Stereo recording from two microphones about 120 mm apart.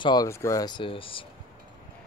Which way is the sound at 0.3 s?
25° left (ahead or behind).